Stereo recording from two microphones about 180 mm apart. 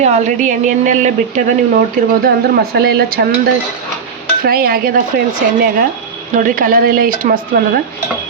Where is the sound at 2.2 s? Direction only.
60° right (ahead or behind).